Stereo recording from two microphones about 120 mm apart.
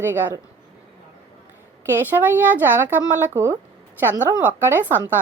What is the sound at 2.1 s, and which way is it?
Speech, 15° right (ahead or behind).